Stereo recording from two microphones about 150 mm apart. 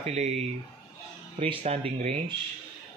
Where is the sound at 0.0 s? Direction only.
45° right (ahead or behind).